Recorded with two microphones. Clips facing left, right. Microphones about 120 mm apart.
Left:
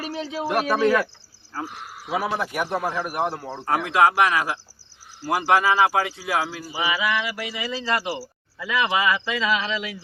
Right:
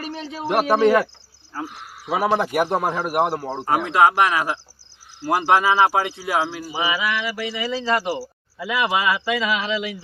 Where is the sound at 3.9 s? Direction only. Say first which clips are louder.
Right 1 dB; 5° right (ahead or behind).